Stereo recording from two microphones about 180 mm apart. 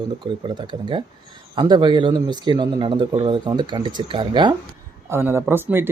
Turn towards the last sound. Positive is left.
turn(degrees=-10)  # may be behind; listen again after turning